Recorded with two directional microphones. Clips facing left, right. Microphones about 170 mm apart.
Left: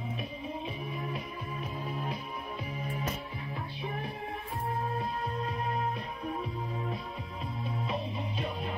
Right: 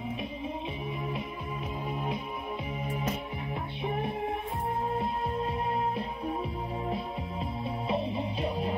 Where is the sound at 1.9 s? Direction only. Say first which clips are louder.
Right 3 dB; 20° right (ahead or behind).